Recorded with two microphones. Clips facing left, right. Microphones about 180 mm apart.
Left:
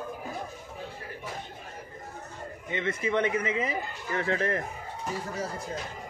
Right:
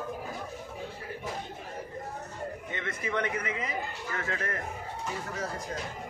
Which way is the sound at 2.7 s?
20° left (ahead or behind).